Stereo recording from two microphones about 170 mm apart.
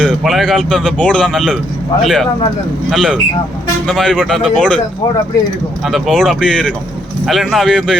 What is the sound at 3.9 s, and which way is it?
Speech, 5° left (ahead or behind).